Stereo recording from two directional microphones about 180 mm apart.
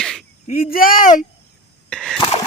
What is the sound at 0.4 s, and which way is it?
Speech, 55° left (ahead or behind).